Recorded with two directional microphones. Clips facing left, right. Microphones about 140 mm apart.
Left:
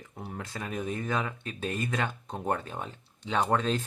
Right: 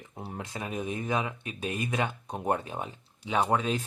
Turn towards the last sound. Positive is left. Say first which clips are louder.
# even
turn(degrees=-10)  # may be behind; listen again after turning